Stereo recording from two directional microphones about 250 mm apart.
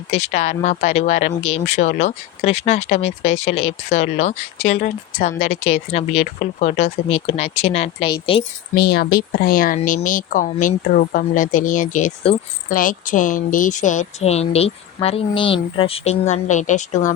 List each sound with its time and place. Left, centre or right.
0.4 s speech: left
8.7 s speech: left